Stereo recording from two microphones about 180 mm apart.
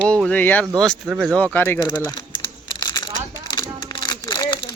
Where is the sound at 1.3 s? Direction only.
10° left (ahead or behind).